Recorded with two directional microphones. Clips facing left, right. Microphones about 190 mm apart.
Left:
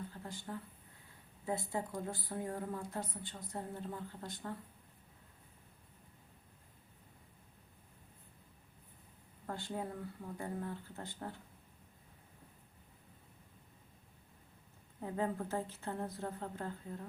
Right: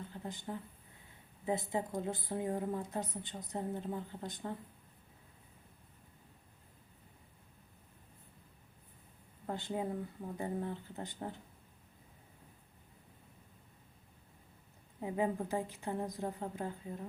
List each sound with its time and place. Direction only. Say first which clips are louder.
0.1 s a sound: right 3 dB; 20° right (ahead or behind)
1.5 s a woman's voice: right 3 dB; 20° right (ahead or behind)
9.5 s a woman's voice: right 4 dB; 20° right (ahead or behind)
15.0 s a woman's voice: right 3 dB; 15° right (ahead or behind)